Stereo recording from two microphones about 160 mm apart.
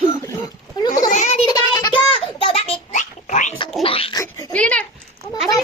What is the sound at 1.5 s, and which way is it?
Child singing, 25° left (ahead or behind).